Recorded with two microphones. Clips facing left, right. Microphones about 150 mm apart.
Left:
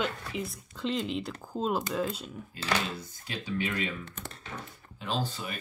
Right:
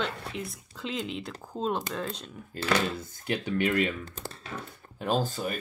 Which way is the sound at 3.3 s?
60° right (ahead or behind).